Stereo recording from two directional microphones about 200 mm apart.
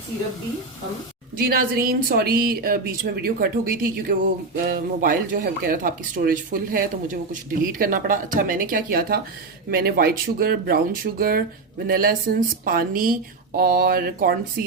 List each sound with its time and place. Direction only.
1.4 s a woman's voice: 50° right (ahead or behind)